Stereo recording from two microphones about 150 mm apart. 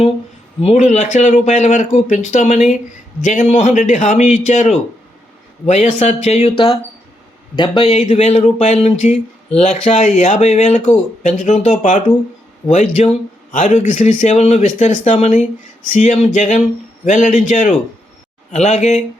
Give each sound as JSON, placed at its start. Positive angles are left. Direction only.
{"t": 0.6, "sound": "a man's voice", "side_deg": 45}
{"t": 7.5, "sound": "speech", "side_deg": 30}
{"t": 7.9, "sound": "a man's voice", "side_deg": 50}